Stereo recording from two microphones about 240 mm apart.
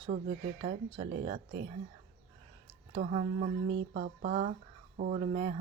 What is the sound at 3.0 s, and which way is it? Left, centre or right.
Speech, right.